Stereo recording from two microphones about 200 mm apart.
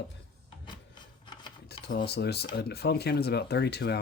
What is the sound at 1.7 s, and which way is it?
Speech, 55° left (ahead or behind).